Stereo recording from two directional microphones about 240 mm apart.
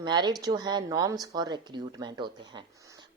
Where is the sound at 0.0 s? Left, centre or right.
Centre.